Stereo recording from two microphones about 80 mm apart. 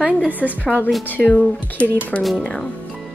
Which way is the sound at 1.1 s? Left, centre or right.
Centre.